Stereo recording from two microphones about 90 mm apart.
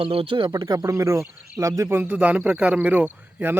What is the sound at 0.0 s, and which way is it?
Speech, 90° right.